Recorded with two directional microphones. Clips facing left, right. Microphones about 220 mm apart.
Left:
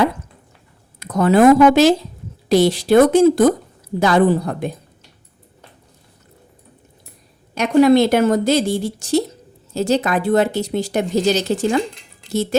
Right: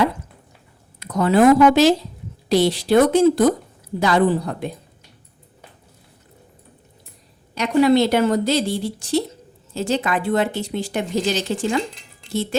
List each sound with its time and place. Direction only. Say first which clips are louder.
0.9 s a woman's voice: left 3 dB; 50° left (ahead or behind)
7.5 s a woman's voice: left 3 dB; 50° left (ahead or behind)